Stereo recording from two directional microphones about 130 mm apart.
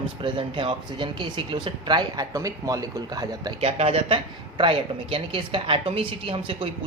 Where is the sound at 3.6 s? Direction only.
50° right (ahead or behind).